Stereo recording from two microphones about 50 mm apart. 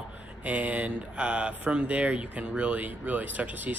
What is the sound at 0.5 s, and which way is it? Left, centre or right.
A man's voice, right.